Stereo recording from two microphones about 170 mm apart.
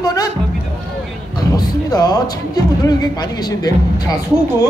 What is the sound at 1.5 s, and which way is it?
Music, 25° left (ahead or behind).